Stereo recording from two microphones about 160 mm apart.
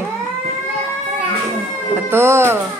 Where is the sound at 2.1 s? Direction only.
15° right (ahead or behind).